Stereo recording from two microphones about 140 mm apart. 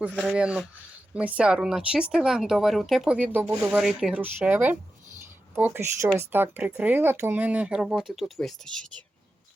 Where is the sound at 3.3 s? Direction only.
15° right (ahead or behind).